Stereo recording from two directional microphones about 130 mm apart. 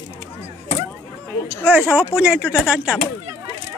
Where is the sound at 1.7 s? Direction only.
10° right (ahead or behind).